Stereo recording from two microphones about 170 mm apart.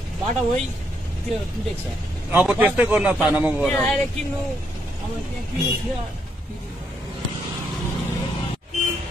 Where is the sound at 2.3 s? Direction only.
10° right (ahead or behind).